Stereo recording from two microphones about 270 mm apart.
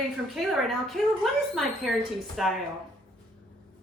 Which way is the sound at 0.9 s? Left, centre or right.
Centre.